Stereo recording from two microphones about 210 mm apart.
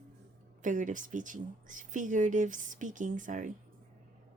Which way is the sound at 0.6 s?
40° right (ahead or behind).